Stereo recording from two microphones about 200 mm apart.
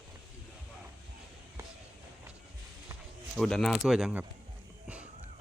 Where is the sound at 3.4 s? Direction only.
5° left (ahead or behind).